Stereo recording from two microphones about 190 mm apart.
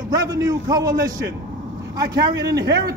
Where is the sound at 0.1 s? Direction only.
20° right (ahead or behind).